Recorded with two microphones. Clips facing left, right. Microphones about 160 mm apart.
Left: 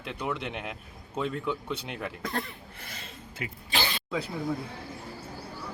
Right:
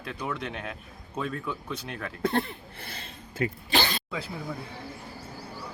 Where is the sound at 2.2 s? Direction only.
30° right (ahead or behind).